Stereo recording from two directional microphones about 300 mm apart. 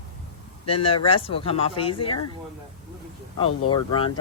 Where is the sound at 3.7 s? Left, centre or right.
Centre.